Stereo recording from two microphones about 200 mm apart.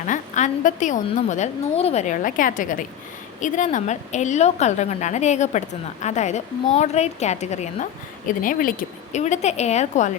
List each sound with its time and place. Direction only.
0.0 s a woman's voice: 40° left (ahead or behind)